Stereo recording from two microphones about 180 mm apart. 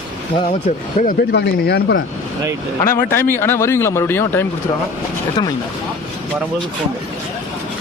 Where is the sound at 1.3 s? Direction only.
65° left (ahead or behind).